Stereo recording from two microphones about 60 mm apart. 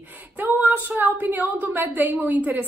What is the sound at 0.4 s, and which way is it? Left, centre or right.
A woman's voice, right.